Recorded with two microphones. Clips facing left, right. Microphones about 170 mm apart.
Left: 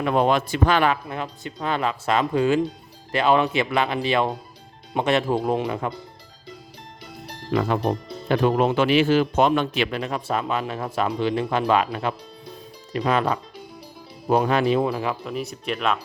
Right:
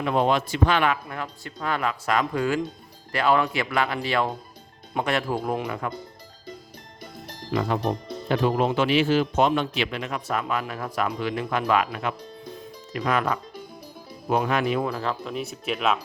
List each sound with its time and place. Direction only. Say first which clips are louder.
0.0 s speech: left 2 dB; 55° left (ahead or behind); by 0.9 s 40° left (ahead or behind)
1.0 s speech: left 3 dB; 20° left (ahead or behind)
7.5 s speech: left 3 dB; 60° left (ahead or behind)
10.0 s speech: left 3 dB; 30° left (ahead or behind); by 15.3 s 10° left (ahead or behind)
15.3 s speech: left 1 dB; centre (ahead or behind)